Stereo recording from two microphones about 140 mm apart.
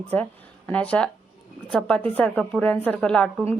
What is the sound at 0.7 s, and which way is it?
Speech, 10° left (ahead or behind).